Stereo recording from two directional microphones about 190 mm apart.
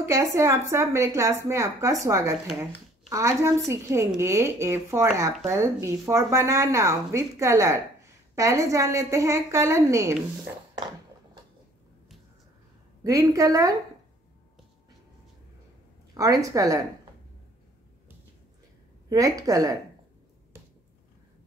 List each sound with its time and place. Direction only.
0.0 s a woman's voice: 15° right (ahead or behind)
13.0 s a woman's voice: 15° right (ahead or behind)
16.2 s a woman's voice: 20° right (ahead or behind)
19.0 s a woman's voice: 20° right (ahead or behind)